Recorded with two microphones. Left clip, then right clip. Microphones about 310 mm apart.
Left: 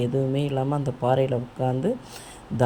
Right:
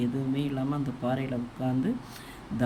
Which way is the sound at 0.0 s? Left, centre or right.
Centre.